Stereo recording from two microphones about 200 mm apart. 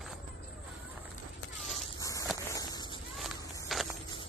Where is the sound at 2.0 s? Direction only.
15° left (ahead or behind).